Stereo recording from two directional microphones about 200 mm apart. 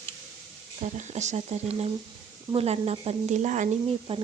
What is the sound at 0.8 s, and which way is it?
A woman's voice, 35° right (ahead or behind).